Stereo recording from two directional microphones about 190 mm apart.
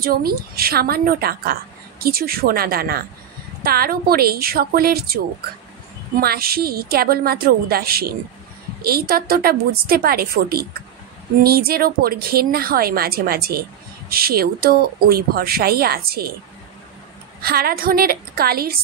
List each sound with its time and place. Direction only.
0.0 s a woman's voice: 50° right (ahead or behind)
17.4 s a woman's voice: 55° right (ahead or behind)